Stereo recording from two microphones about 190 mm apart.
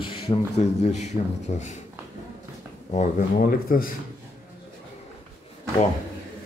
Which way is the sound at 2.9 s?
40° left (ahead or behind).